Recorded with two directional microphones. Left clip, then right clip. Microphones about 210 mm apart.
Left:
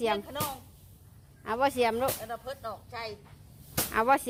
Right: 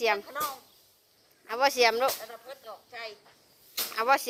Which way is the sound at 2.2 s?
55° left (ahead or behind).